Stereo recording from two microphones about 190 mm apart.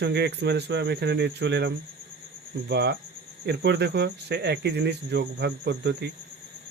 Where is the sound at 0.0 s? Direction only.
60° right (ahead or behind).